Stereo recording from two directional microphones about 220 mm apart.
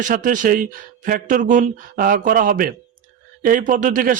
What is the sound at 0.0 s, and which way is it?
Speech, 35° right (ahead or behind).